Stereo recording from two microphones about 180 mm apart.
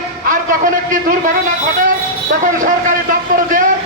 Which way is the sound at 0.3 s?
50° right (ahead or behind).